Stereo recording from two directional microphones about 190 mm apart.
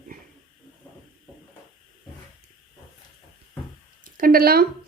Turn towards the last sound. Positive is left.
turn(degrees=-55)  # may be behind; listen again after turning